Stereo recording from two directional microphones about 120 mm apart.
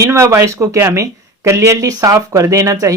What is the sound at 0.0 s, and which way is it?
Speech, 25° right (ahead or behind).